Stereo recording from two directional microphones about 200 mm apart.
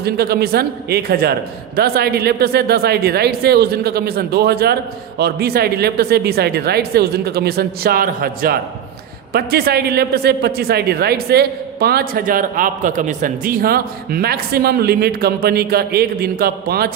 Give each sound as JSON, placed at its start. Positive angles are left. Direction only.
{"t": 0.0, "sound": "a man's voice", "side_deg": -50}